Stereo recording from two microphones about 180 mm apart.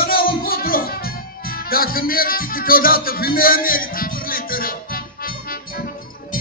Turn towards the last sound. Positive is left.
turn(degrees=55)  # may be behind; listen again after turning